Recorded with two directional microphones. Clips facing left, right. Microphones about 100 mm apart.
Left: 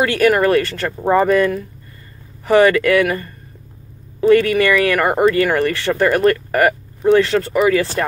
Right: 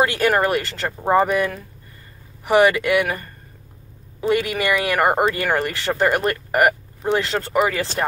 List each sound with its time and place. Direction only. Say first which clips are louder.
0.0 s speech: left 4 dB; 25° right (ahead or behind)
1.2 s speech: left 6 dB; 15° right (ahead or behind)
4.2 s speech: left 8 dB; 20° right (ahead or behind)